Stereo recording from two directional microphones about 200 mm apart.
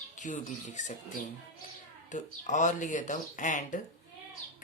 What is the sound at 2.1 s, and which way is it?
Speech, 40° left (ahead or behind).